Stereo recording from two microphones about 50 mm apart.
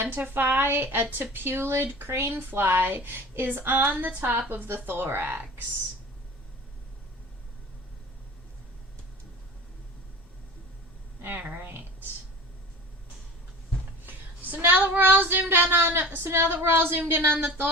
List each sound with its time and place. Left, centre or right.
0.0 s a woman's voice: right
2.3 s speech: right
11.3 s speech: right
14.0 s speech: right
15.4 s speech: right